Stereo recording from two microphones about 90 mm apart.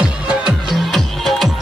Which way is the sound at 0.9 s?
Centre (ahead or behind).